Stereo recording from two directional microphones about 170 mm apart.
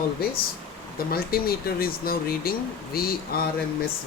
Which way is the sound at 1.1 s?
60° left (ahead or behind).